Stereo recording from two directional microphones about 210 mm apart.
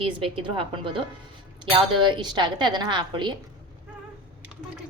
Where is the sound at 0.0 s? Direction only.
25° right (ahead or behind).